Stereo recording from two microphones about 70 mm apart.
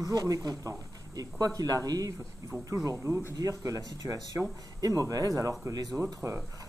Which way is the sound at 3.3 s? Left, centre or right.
Right.